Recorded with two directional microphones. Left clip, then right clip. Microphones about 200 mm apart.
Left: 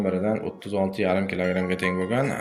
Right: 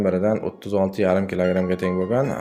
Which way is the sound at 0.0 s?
45° right (ahead or behind).